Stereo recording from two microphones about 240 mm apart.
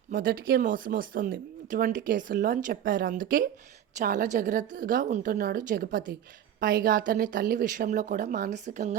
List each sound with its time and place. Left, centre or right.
0.1 s speech: right